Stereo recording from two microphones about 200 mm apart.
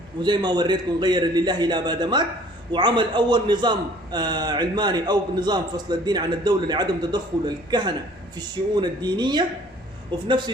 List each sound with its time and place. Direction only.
0.2 s a man's voice: 20° right (ahead or behind)